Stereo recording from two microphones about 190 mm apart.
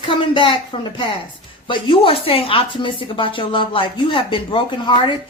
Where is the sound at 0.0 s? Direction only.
25° left (ahead or behind).